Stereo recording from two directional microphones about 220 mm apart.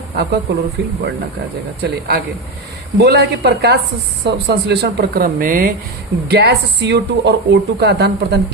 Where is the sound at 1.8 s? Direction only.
45° right (ahead or behind).